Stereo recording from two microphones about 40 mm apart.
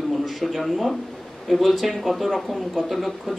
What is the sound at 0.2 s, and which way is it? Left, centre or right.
Speech, centre.